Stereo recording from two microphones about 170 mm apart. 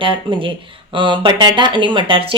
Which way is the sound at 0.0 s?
30° right (ahead or behind).